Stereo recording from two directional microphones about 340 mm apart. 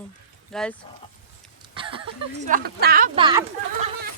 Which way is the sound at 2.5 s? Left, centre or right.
Right.